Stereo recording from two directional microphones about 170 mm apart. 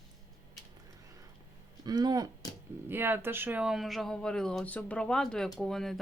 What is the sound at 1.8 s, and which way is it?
A woman's voice, 25° right (ahead or behind).